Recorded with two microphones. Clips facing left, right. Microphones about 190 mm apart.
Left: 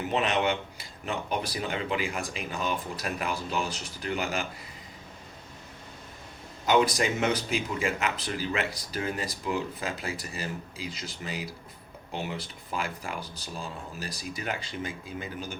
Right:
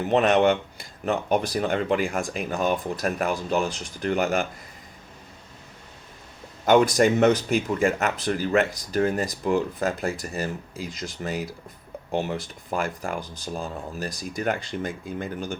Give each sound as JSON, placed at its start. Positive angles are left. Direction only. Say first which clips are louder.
{"t": 0.1, "sound": "speech", "louder": "right 8 dB", "side_deg": -45}
{"t": 6.9, "sound": "speech", "louder": "right 9 dB", "side_deg": -45}